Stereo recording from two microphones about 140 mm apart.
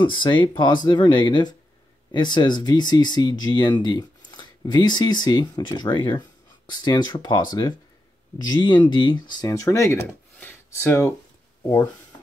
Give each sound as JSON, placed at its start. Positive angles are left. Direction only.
{"t": 0.0, "sound": "speech", "side_deg": 35}